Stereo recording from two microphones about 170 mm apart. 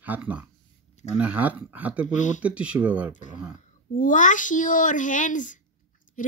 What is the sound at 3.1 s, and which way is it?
A child's voice, 45° left (ahead or behind).